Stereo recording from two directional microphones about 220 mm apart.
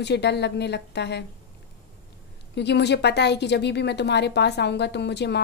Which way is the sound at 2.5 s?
50° left (ahead or behind).